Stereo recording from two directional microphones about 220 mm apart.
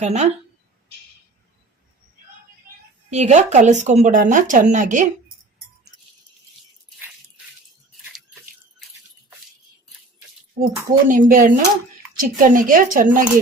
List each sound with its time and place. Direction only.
0.0 s speech: 30° right (ahead or behind)
3.1 s speech: 30° right (ahead or behind)
10.6 s speech: 40° right (ahead or behind)